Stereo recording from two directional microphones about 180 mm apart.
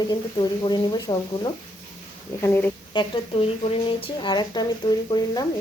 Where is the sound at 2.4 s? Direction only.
10° left (ahead or behind).